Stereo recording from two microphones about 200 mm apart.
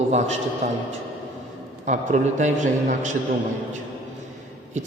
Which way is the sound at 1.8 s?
40° right (ahead or behind).